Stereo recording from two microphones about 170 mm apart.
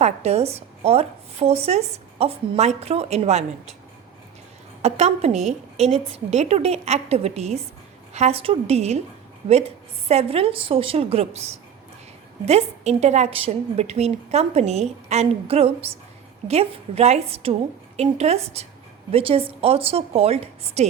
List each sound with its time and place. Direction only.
0.0 s speech: 40° right (ahead or behind)
4.8 s speech: 40° right (ahead or behind)
12.5 s speech: 40° right (ahead or behind)